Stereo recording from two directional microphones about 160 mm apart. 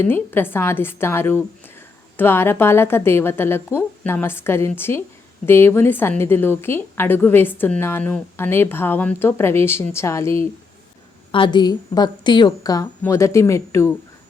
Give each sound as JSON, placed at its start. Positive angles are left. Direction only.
{"t": 0.0, "sound": "a woman's voice", "side_deg": 15}
{"t": 11.3, "sound": "a woman's voice", "side_deg": 30}